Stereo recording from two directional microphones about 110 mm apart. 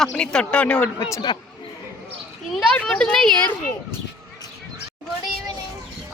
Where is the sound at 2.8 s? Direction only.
5° left (ahead or behind).